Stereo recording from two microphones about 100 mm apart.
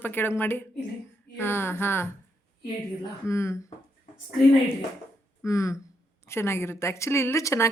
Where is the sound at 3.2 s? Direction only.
30° left (ahead or behind).